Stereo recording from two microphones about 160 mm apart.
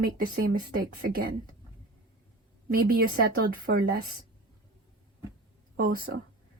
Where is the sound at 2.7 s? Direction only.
65° right (ahead or behind).